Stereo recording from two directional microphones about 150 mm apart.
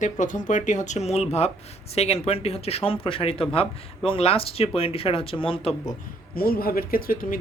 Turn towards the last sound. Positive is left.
turn(degrees=75)  # may be behind; listen again after turning